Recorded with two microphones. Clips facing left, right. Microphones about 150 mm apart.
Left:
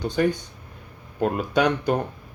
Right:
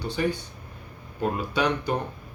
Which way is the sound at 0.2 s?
55° left (ahead or behind).